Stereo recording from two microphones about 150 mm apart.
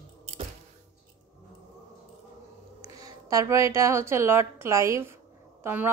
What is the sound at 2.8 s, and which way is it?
A woman's voice, 25° right (ahead or behind).